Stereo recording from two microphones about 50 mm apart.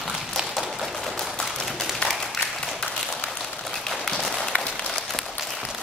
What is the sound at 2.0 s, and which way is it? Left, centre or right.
Applause, centre.